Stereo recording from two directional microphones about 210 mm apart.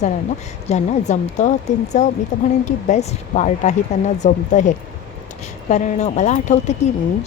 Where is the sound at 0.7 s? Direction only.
35° left (ahead or behind).